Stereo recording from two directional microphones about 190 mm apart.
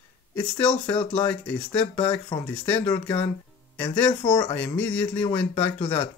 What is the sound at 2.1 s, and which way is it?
Speech, 10° left (ahead or behind).